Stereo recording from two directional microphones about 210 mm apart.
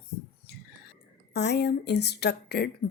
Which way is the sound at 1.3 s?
50° left (ahead or behind).